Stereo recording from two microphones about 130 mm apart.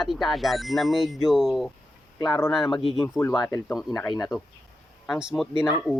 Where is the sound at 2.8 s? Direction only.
40° left (ahead or behind).